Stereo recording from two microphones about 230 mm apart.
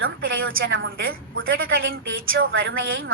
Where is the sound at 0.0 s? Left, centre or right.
Right.